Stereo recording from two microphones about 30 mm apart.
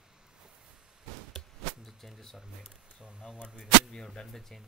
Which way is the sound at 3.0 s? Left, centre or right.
Right.